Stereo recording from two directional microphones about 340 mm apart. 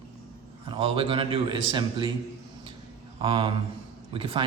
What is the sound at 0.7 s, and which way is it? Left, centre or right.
Speech, centre.